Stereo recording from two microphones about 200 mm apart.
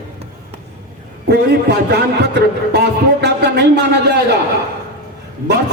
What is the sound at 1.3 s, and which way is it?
Speech, 55° right (ahead or behind).